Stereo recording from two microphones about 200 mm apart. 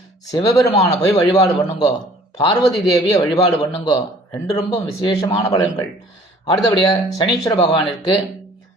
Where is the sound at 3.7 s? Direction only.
20° left (ahead or behind).